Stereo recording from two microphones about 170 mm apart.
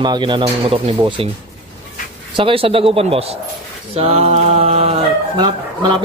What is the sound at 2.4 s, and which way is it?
Speech, 30° right (ahead or behind).